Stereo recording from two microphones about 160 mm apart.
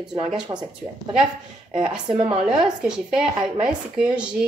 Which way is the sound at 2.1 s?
40° right (ahead or behind).